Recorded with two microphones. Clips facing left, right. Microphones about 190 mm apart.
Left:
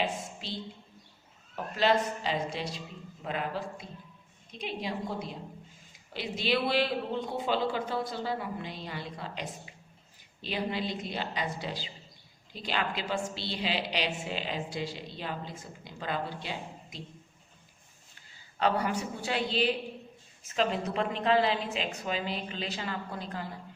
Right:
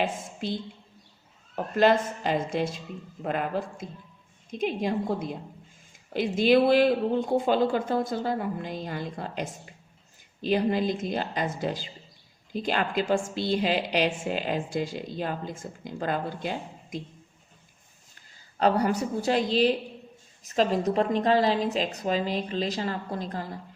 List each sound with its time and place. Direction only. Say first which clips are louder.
0.0 s a woman's voice: right 4 dB; 50° right (ahead or behind)
1.5 s a woman's voice: right 5 dB; 50° right (ahead or behind)
18.1 s a woman's voice: right 2 dB; 40° right (ahead or behind)